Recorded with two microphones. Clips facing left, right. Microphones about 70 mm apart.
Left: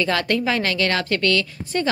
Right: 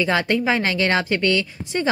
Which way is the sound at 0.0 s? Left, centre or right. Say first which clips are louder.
Right 1 dB; centre.